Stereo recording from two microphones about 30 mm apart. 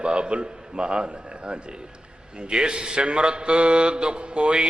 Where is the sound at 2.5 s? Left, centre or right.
Right.